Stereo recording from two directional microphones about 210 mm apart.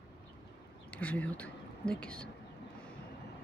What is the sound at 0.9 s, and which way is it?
Speech, 5° left (ahead or behind).